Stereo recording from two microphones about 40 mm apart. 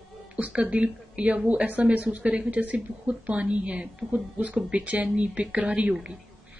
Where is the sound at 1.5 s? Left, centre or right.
Right.